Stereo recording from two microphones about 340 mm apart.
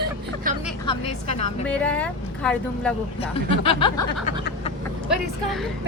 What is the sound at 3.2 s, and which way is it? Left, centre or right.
Speech, centre.